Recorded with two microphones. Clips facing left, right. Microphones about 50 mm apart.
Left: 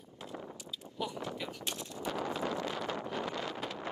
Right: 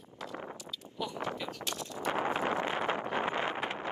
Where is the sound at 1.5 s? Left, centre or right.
Left.